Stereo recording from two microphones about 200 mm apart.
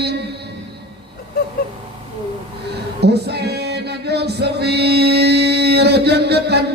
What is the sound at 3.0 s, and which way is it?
Music, 55° right (ahead or behind).